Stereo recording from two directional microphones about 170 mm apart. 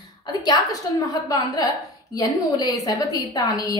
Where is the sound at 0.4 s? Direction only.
25° left (ahead or behind).